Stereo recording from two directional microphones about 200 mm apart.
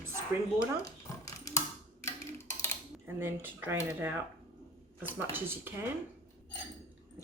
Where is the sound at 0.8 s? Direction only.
15° left (ahead or behind).